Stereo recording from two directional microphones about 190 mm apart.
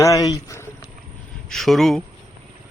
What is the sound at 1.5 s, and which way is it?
Speech, centre (ahead or behind).